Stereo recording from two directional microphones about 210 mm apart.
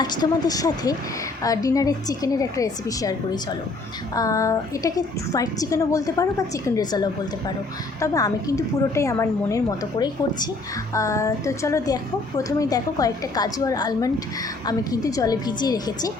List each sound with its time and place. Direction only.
0.0 s a woman's voice: 20° left (ahead or behind)